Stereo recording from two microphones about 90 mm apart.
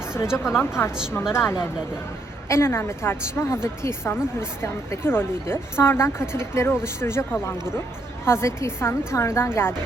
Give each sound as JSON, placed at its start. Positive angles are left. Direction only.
{"t": 0.3, "sound": "a woman's voice", "side_deg": 25}